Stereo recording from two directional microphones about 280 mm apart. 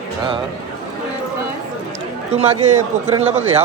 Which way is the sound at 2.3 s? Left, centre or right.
Right.